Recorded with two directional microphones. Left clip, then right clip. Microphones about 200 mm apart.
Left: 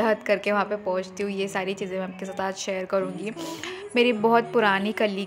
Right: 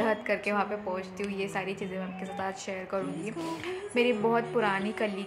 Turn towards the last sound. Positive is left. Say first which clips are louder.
# left 7 dB
turn(degrees=45)  # may be behind; listen again after turning